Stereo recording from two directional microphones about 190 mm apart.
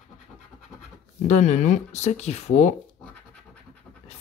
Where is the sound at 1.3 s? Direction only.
40° left (ahead or behind).